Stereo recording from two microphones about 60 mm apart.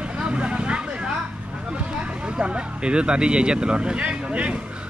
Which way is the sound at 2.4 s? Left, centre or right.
Centre.